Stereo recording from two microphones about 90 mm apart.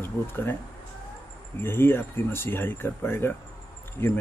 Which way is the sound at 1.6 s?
25° left (ahead or behind).